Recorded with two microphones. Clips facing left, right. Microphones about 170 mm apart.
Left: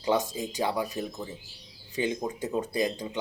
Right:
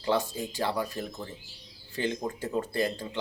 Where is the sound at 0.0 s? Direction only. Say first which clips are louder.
Left 1 dB; 20° left (ahead or behind).